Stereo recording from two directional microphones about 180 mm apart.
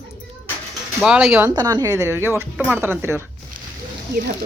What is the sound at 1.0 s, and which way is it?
Speech, 5° right (ahead or behind).